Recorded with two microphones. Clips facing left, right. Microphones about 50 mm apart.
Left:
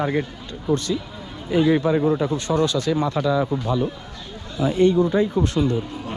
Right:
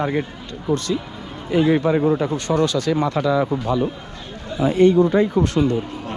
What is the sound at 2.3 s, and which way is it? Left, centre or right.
Speech, right.